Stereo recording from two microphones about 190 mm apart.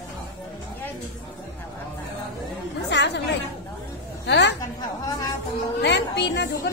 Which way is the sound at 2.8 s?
65° left (ahead or behind).